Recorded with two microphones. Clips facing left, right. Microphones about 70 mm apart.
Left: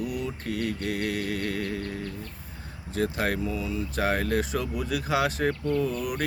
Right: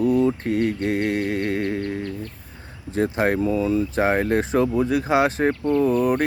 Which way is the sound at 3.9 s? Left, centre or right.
Right.